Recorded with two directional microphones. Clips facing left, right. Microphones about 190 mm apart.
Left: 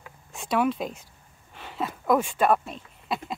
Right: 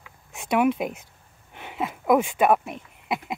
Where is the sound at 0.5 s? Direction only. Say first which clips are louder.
Right 3 dB; 15° right (ahead or behind).